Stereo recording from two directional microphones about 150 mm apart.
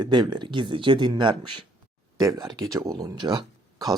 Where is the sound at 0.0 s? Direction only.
30° right (ahead or behind).